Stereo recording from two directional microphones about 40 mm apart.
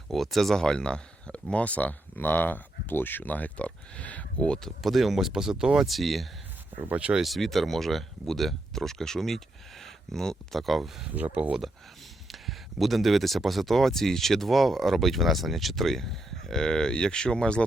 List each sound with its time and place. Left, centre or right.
0.1 s speech: centre
0.5 s speech: centre
4.8 s speech: centre
5.9 s speech: centre
6.9 s speech: right
7.3 s speech: centre
11.1 s speech: right
12.3 s speech: centre; by 17.6 s left